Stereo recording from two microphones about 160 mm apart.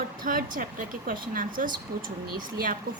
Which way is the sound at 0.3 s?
60° right (ahead or behind).